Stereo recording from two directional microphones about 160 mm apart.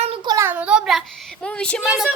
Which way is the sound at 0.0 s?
35° right (ahead or behind).